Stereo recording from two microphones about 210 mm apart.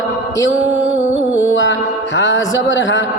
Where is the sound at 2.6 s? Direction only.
65° left (ahead or behind).